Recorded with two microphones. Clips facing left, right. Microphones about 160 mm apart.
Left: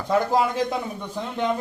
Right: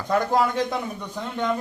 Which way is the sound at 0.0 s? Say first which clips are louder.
Left 1 dB; 5° left (ahead or behind).